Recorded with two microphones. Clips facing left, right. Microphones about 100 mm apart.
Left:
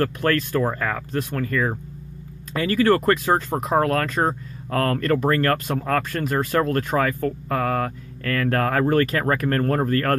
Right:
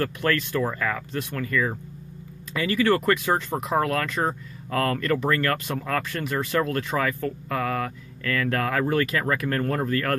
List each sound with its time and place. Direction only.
0.0 s speech: 40° left (ahead or behind)